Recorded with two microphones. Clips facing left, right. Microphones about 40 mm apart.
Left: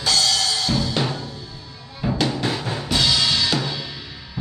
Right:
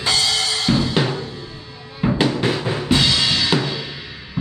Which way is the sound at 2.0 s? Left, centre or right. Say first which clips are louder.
Right 4 dB; right.